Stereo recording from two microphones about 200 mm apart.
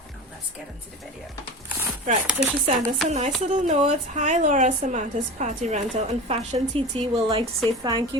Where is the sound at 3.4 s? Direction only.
40° right (ahead or behind).